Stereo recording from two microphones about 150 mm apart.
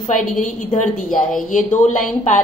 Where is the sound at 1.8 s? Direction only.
55° left (ahead or behind).